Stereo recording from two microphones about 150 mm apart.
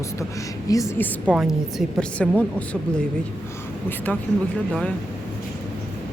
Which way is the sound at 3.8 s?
10° left (ahead or behind).